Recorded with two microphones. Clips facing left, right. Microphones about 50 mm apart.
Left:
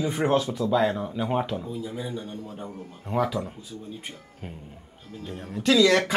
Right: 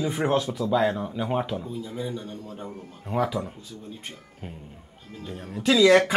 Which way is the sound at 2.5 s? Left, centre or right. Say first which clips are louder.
Even; centre.